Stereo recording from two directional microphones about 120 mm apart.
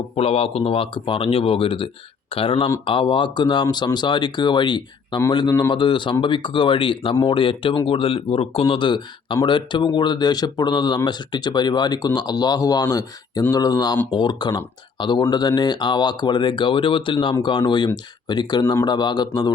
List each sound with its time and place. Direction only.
0.2 s speech: 55° left (ahead or behind); by 19.5 s 35° left (ahead or behind)